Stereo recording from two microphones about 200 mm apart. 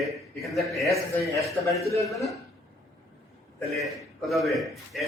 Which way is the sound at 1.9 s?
15° left (ahead or behind).